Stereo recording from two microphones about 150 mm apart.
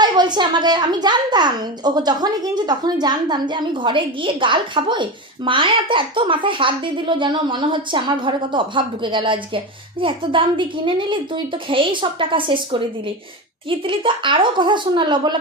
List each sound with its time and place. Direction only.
0.0 s a child's voice: 30° right (ahead or behind)